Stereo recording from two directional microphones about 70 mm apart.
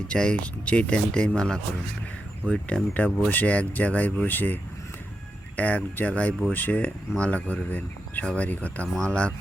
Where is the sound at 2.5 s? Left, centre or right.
Centre.